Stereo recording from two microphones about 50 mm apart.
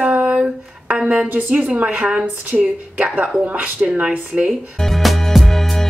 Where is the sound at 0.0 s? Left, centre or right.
Right.